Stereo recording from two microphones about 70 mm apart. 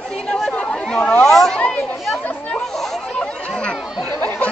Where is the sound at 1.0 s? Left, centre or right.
Left.